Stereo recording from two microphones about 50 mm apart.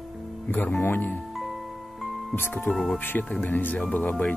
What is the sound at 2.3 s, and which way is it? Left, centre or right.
Speech, left.